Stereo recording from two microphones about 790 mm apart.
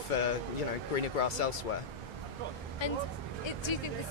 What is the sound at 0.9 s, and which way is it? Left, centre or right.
Speech, left.